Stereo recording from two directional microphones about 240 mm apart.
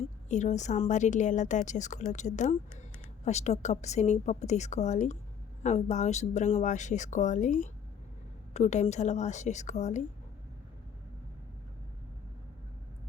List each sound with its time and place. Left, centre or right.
0.3 s a woman's voice: left